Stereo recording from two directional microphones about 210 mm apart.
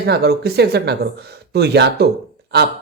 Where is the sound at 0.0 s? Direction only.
50° right (ahead or behind).